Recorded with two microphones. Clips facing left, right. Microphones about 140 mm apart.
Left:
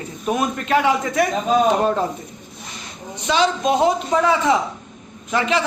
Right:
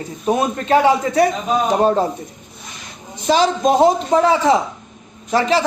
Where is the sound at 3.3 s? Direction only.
40° right (ahead or behind).